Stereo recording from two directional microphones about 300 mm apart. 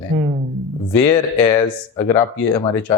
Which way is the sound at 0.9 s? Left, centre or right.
Centre.